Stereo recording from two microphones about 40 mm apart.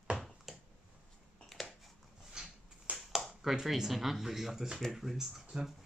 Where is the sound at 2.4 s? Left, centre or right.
Centre.